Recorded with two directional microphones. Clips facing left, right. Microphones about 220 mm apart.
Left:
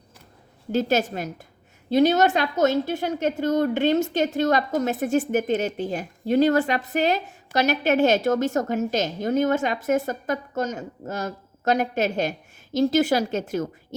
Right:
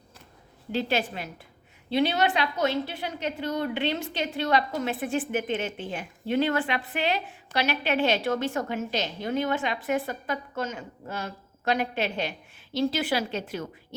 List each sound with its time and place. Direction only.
0.7 s a woman's voice: 45° left (ahead or behind)